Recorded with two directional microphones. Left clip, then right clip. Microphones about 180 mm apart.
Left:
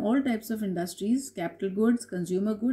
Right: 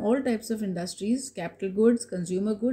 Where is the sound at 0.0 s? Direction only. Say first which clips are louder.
Right 2 dB; 40° right (ahead or behind).